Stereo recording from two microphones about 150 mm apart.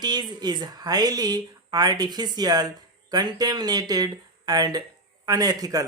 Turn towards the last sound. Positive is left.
turn(degrees=-25)  # may be behind; listen again after turning